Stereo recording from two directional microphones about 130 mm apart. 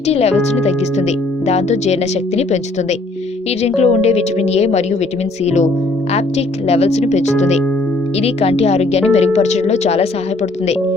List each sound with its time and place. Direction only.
0.1 s speech: 55° left (ahead or behind)
3.6 s speech: 55° left (ahead or behind)